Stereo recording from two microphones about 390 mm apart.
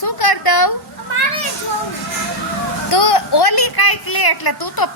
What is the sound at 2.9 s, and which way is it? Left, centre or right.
A woman's voice, left.